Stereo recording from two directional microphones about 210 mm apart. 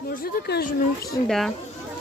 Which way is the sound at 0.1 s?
45° left (ahead or behind).